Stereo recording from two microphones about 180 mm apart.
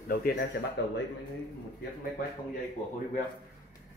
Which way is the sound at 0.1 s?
55° left (ahead or behind).